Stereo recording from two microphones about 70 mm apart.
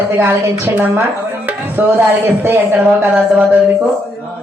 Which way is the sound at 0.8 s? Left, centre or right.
Right.